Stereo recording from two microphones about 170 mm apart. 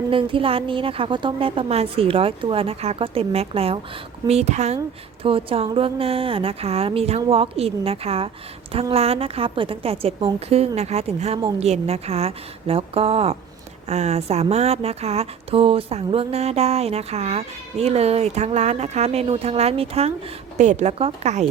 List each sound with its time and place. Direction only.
0.1 s speech: 30° right (ahead or behind)